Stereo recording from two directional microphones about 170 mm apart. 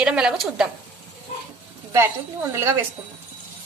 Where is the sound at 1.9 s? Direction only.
15° right (ahead or behind).